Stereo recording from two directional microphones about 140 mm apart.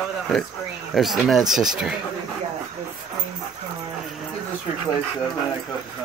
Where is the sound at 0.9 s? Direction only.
Centre (ahead or behind).